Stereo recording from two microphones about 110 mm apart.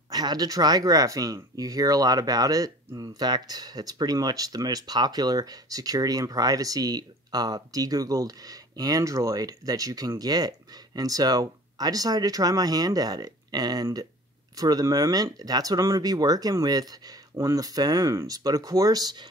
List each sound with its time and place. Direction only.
0.1 s speech: 40° right (ahead or behind)